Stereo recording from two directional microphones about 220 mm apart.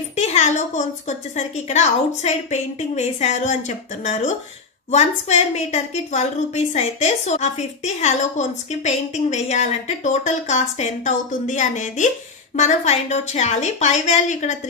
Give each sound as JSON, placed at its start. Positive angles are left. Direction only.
{"t": 0.1, "sound": "a woman's voice", "side_deg": 30}